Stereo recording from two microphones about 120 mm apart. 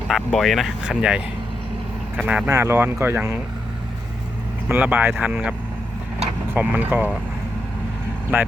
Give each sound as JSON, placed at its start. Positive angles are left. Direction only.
{"t": 0.3, "sound": "speech", "side_deg": 0}
{"t": 4.7, "sound": "speech", "side_deg": -15}
{"t": 8.3, "sound": "speech", "side_deg": -15}